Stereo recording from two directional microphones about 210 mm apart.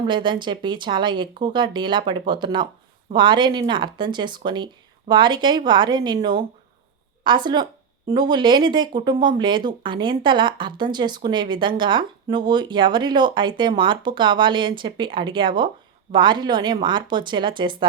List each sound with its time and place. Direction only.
0.0 s speech: 20° right (ahead or behind)
7.3 s speech: 20° right (ahead or behind)